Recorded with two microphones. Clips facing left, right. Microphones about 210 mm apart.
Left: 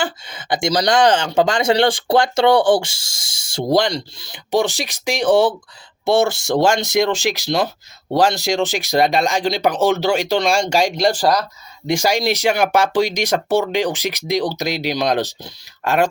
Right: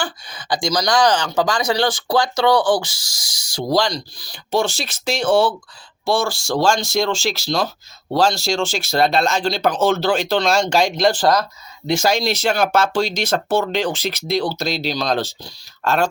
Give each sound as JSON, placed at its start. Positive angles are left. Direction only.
{"t": 0.0, "sound": "speech", "side_deg": 25}